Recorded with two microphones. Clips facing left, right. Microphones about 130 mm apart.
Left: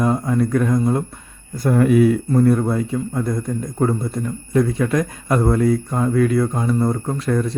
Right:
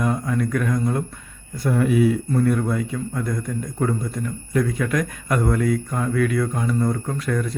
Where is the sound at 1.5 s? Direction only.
45° left (ahead or behind).